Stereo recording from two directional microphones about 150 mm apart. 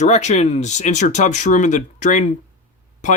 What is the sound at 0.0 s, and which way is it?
Speech, 50° left (ahead or behind).